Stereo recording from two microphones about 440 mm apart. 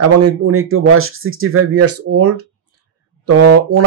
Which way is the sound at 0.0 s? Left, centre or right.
Right.